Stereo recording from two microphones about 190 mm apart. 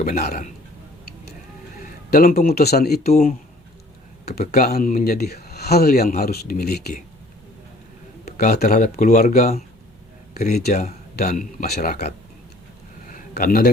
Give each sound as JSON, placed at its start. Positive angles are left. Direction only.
{"t": 0.0, "sound": "speech", "side_deg": 50}
{"t": 1.8, "sound": "speech", "side_deg": 50}
{"t": 4.3, "sound": "speech", "side_deg": 55}
{"t": 8.2, "sound": "a sound", "side_deg": 55}
{"t": 8.6, "sound": "speech", "side_deg": 45}
{"t": 11.2, "sound": "speech", "side_deg": 45}
{"t": 13.1, "sound": "a sound", "side_deg": 45}